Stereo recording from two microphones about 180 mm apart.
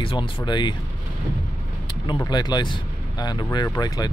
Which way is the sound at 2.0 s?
25° left (ahead or behind).